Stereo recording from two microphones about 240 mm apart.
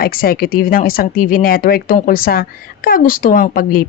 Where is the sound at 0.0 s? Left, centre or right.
Left.